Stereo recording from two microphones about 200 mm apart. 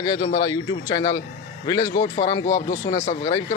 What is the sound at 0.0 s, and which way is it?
A man's voice, 20° left (ahead or behind).